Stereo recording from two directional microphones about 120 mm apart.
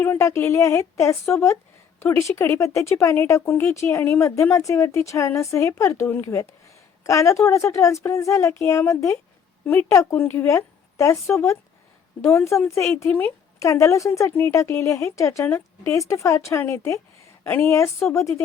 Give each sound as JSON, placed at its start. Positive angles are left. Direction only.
{"t": 0.0, "sound": "speech", "side_deg": 20}